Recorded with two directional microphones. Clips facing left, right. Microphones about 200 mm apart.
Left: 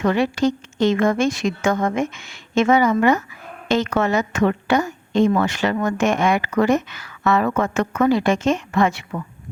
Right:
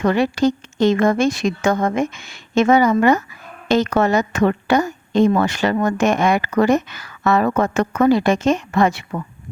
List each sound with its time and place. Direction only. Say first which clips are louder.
0.2 s a woman's voice: right 2 dB; 40° right (ahead or behind)